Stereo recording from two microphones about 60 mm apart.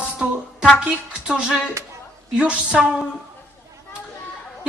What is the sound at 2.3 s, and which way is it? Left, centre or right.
Speech, centre.